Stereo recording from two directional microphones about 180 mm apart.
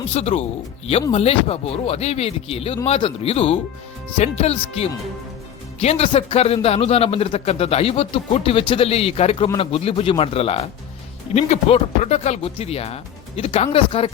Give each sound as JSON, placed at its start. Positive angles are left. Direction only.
{"t": 0.1, "sound": "a man's voice", "side_deg": 35}